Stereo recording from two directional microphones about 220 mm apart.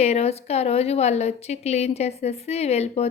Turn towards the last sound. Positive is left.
turn(degrees=30)  # may be behind; listen again after turning